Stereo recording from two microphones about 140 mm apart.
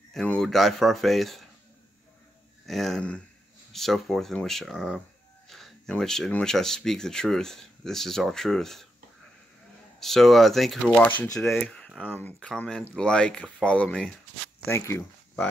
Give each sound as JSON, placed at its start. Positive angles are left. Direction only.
{"t": 0.1, "sound": "speech", "side_deg": 5}
{"t": 2.6, "sound": "speech", "side_deg": 0}
{"t": 9.9, "sound": "speech", "side_deg": 0}